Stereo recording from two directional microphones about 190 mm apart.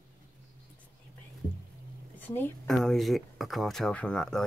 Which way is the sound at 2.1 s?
10° left (ahead or behind).